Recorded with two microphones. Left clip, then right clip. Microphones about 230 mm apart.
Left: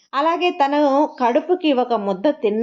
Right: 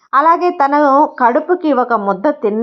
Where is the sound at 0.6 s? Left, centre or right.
Right.